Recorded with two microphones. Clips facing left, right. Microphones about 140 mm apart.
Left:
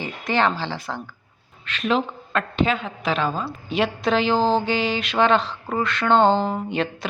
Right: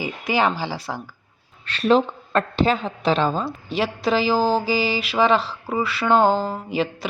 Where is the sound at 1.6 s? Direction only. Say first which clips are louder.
Right 5 dB; 35° right (ahead or behind).